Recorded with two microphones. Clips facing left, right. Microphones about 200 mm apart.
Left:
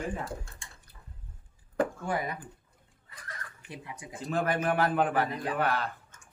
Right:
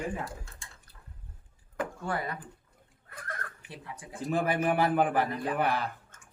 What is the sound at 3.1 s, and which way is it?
Neigh, 55° right (ahead or behind).